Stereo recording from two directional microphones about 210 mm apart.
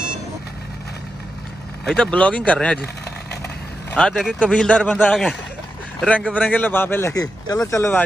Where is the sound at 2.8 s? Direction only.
50° left (ahead or behind).